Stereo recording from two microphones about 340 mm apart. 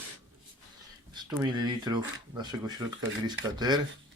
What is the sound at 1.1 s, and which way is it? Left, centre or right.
Speech, centre.